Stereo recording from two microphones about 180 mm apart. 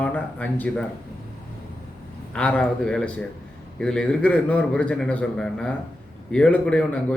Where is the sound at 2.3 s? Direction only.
5° left (ahead or behind).